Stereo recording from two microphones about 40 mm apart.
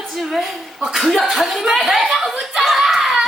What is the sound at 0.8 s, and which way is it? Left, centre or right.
Speech, centre.